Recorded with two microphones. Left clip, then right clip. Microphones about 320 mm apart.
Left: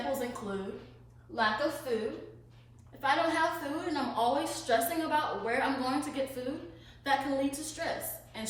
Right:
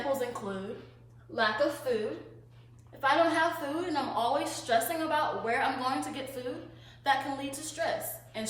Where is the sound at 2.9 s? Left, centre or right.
Centre.